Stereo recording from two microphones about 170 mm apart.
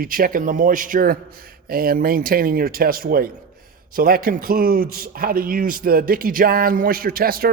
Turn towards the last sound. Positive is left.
turn(degrees=-60)  # may be behind; listen again after turning